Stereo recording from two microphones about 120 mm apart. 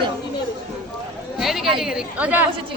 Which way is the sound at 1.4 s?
5° right (ahead or behind).